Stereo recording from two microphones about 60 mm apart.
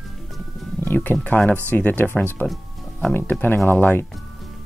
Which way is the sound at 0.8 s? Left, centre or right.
Left.